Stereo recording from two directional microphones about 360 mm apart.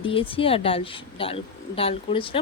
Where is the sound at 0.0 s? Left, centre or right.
Centre.